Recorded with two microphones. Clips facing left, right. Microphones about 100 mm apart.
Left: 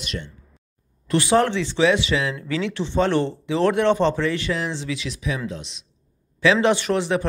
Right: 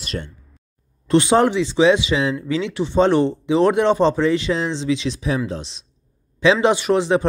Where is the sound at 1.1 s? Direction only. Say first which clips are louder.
Right 4 dB; 20° right (ahead or behind).